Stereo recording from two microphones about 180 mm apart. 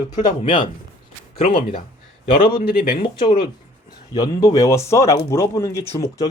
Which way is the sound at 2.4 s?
55° left (ahead or behind).